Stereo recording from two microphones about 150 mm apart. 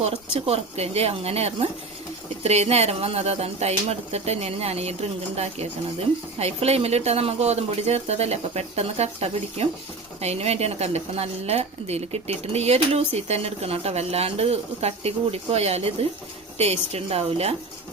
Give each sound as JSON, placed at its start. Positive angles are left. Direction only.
{"t": 0.0, "sound": "a woman's voice", "side_deg": -45}